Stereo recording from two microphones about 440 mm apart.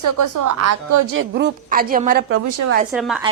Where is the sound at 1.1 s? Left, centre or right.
Right.